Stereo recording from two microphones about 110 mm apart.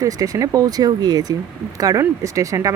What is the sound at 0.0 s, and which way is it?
Speech, 30° right (ahead or behind).